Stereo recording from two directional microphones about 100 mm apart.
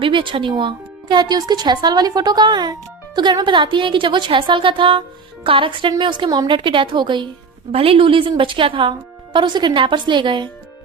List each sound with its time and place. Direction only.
0.0 s a woman's voice: 55° right (ahead or behind)
7.7 s a woman's voice: 70° right (ahead or behind); by 10.5 s 50° right (ahead or behind)